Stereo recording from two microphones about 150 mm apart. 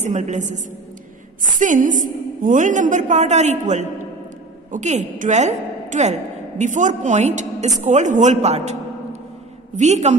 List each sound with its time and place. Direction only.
0.0 s a woman's voice: 50° right (ahead or behind)
9.8 s a woman's voice: 50° right (ahead or behind)